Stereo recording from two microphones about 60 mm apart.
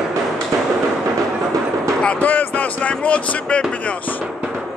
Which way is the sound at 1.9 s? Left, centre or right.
Centre.